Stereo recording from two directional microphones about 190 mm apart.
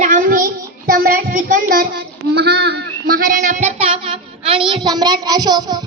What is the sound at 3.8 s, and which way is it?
A child's voice, 30° right (ahead or behind).